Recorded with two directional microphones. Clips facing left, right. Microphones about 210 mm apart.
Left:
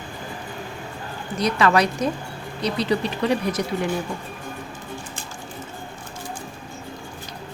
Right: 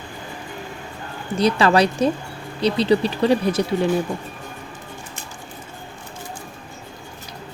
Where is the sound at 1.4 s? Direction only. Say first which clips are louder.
Right 3 dB; 30° right (ahead or behind).